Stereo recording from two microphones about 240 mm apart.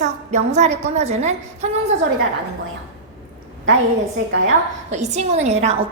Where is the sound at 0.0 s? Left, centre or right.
Right.